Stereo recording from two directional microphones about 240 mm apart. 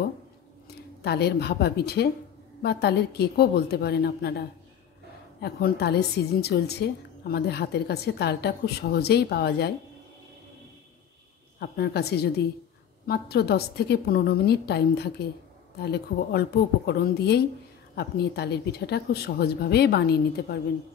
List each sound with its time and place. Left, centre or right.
1.0 s a woman's voice: left
5.4 s a woman's voice: left
11.6 s a woman's voice: left